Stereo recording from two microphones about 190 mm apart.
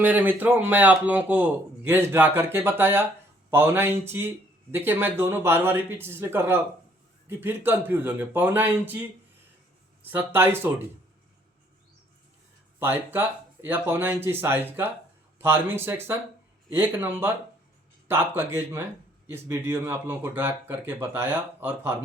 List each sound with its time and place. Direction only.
0.0 s a man's voice: 10° right (ahead or behind)
12.8 s a man's voice: 10° right (ahead or behind)